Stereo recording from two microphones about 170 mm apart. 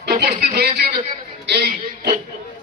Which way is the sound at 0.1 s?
75° right (ahead or behind).